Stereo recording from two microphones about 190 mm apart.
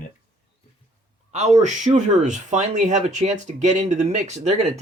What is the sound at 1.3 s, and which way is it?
Speech, 35° right (ahead or behind).